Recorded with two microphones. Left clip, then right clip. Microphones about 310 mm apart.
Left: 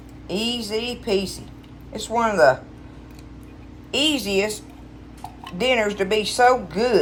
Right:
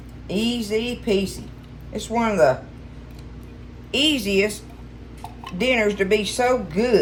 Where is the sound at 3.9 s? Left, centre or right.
Centre.